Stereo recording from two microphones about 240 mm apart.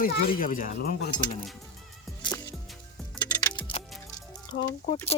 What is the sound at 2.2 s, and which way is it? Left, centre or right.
Music, centre.